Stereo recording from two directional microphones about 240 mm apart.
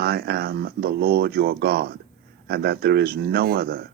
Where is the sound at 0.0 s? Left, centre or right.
Right.